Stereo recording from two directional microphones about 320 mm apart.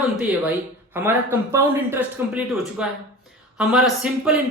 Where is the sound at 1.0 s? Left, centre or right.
Centre.